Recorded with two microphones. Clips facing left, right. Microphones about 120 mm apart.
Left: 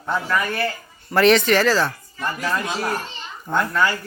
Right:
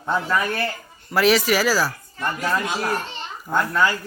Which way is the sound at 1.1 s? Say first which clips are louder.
Left 3 dB; 5° right (ahead or behind).